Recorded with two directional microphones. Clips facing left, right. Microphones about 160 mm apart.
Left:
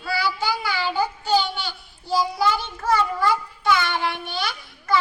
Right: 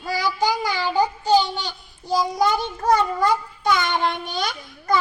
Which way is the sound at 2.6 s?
40° right (ahead or behind).